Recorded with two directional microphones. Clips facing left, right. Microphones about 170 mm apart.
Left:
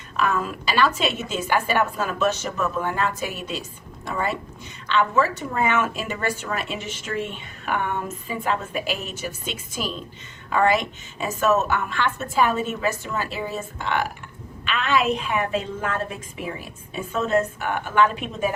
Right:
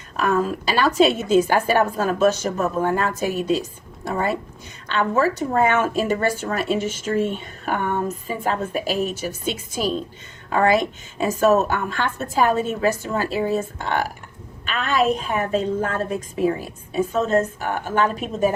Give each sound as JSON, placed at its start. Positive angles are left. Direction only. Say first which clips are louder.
{"t": 0.2, "sound": "a woman's voice", "louder": "right 4 dB", "side_deg": -40}